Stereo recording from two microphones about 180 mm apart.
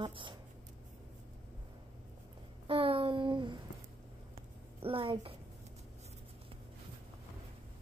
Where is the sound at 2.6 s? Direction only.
30° right (ahead or behind).